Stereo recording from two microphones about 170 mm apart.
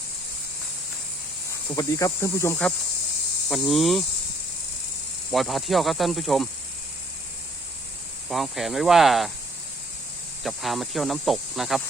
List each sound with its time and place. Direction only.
1.7 s cricket: 20° left (ahead or behind)
3.5 s speech: centre (ahead or behind)
5.3 s speech: centre (ahead or behind)
8.3 s speech: centre (ahead or behind)
10.4 s speech: centre (ahead or behind)